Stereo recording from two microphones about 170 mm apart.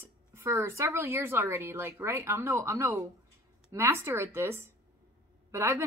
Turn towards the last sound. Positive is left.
turn(degrees=-15)  # may be behind; listen again after turning